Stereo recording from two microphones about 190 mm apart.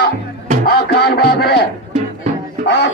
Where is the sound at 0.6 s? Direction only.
55° left (ahead or behind).